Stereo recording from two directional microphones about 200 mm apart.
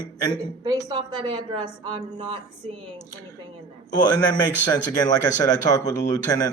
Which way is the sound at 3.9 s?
20° left (ahead or behind).